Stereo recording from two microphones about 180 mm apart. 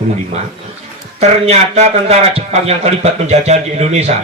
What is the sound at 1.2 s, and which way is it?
A man's voice, 35° right (ahead or behind).